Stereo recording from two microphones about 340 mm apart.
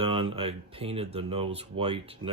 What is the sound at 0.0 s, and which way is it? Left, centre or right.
Speech, centre.